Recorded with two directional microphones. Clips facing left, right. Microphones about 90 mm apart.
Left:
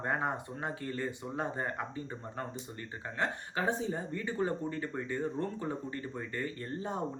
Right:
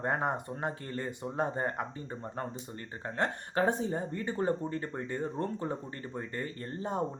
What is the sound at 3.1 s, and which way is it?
Speech, 50° right (ahead or behind).